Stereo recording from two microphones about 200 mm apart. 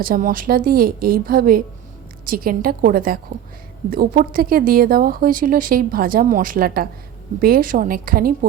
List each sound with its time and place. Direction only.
0.0 s a woman's voice: 45° right (ahead or behind)